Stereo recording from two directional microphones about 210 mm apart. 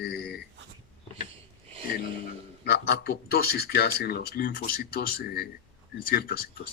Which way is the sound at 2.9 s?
45° left (ahead or behind).